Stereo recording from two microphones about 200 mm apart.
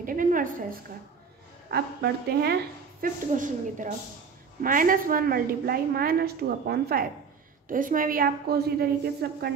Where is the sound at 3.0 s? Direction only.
40° right (ahead or behind).